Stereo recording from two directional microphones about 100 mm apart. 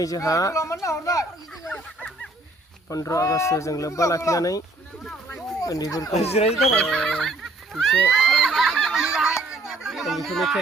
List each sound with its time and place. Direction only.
0.0 s speech: 35° left (ahead or behind)
1.7 s a sound: 10° left (ahead or behind)
2.9 s speech: 35° left (ahead or behind)
5.6 s speech: 35° left (ahead or behind)
6.1 s speech: 90° left
6.8 s a sound: 5° left (ahead or behind)
9.5 s chatter: 5° right (ahead or behind)